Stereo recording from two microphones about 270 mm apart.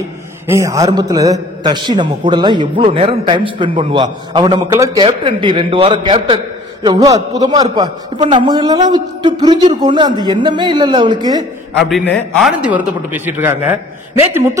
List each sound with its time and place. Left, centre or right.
0.5 s a man's voice: centre
11.8 s a man's voice: centre